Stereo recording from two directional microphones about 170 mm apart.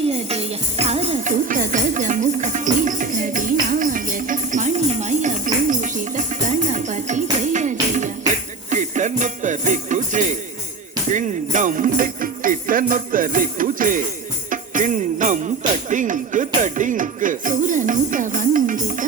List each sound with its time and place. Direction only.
0.1 s music: 40° right (ahead or behind)
11.1 s jingle bell: 50° right (ahead or behind)
16.6 s music: 45° right (ahead or behind)